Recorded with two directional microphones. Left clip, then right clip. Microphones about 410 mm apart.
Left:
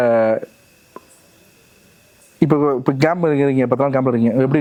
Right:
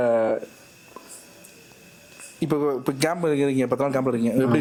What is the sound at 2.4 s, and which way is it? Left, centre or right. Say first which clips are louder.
Speech: left 8 dB; left.